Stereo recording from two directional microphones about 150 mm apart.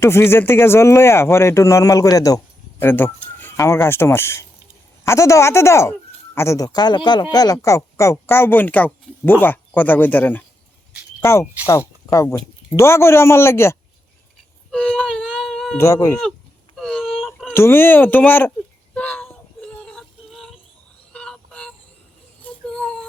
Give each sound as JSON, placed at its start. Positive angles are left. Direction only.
{"t": 0.0, "sound": "speech", "side_deg": 15}
{"t": 14.7, "sound": "whimper", "side_deg": 5}
{"t": 15.3, "sound": "a sound", "side_deg": 0}
{"t": 15.8, "sound": "speech", "side_deg": 20}
{"t": 16.7, "sound": "a sound", "side_deg": 5}
{"t": 17.5, "sound": "speech", "side_deg": 15}
{"t": 18.9, "sound": "female singing", "side_deg": 10}
{"t": 21.1, "sound": "vehicle", "side_deg": 5}
{"t": 22.4, "sound": "a sound", "side_deg": 5}